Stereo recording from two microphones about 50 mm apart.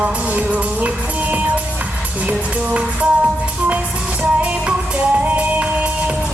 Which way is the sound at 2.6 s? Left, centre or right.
Right.